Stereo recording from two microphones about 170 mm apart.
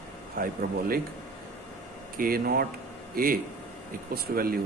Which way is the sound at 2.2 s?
60° right (ahead or behind).